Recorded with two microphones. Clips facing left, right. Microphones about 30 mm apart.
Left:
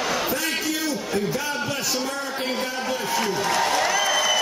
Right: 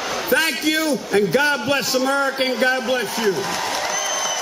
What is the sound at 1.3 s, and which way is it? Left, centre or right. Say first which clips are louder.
A man's voice: right 8 dB; right.